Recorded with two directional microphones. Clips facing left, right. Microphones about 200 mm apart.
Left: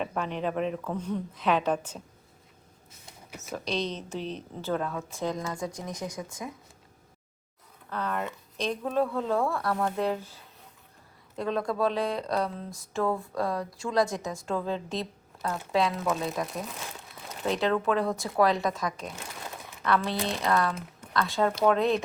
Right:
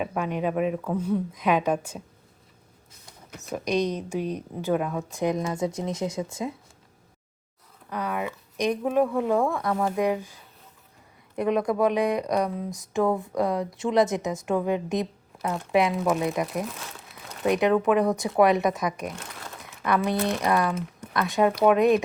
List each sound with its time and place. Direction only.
0.0 s speech: 10° right (ahead or behind)
3.5 s speech: 15° right (ahead or behind)
7.9 s speech: 10° right (ahead or behind)